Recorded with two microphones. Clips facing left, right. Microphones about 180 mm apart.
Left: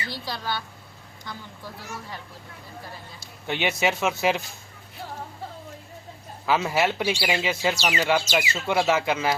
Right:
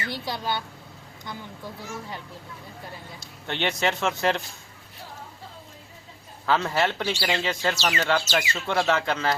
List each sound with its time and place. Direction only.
0.1 s a woman's voice: 20° right (ahead or behind)
3.2 s speech: 10° left (ahead or behind)
6.4 s speech: 10° left (ahead or behind)